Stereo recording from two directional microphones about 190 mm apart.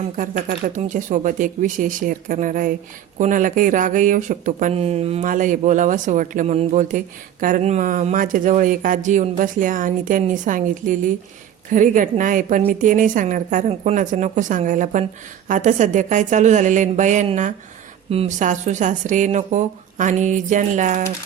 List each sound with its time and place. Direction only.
0.2 s speech: 45° right (ahead or behind)